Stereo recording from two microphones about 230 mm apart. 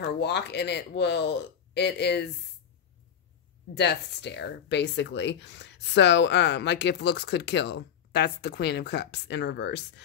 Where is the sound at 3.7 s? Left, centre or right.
Left.